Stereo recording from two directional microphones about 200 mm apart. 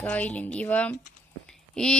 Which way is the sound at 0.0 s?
5° left (ahead or behind).